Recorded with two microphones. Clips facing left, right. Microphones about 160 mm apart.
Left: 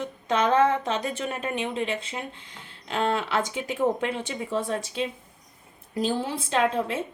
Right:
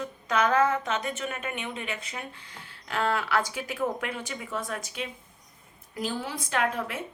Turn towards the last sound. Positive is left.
turn(degrees=25)  # may be behind; listen again after turning